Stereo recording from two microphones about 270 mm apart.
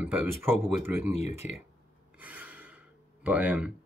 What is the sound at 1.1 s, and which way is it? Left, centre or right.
Speech, left.